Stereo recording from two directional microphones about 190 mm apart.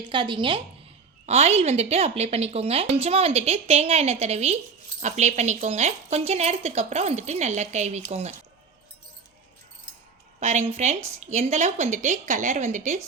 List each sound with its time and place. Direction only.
0.1 s a woman's voice: 25° right (ahead or behind)
10.4 s a woman's voice: 35° right (ahead or behind)